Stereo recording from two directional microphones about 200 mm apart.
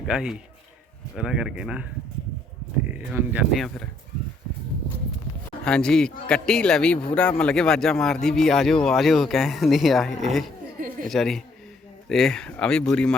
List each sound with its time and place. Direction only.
0.1 s speech: 5° right (ahead or behind)
5.6 s speech: 5° left (ahead or behind)
10.8 s a sound: 45° right (ahead or behind)
11.1 s speech: centre (ahead or behind)